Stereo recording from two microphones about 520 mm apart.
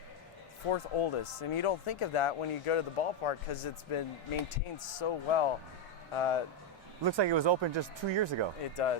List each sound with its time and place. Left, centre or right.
0.7 s speech: left
4.9 s speech: left
7.0 s speech: right
8.7 s speech: left